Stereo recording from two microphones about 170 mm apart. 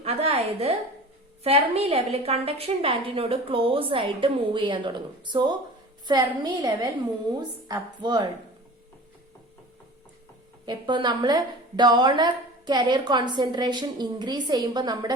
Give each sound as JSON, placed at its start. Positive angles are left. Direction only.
{"t": 0.0, "sound": "a woman's voice", "side_deg": -35}
{"t": 10.7, "sound": "a woman's voice", "side_deg": -25}